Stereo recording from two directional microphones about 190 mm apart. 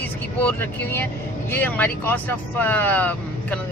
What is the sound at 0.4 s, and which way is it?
Speech, 10° left (ahead or behind).